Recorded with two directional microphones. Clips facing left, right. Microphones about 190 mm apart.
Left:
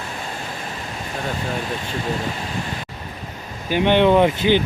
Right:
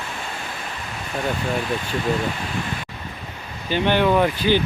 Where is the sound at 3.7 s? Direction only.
20° left (ahead or behind).